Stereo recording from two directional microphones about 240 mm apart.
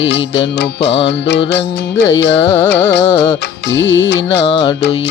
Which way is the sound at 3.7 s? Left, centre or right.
Left.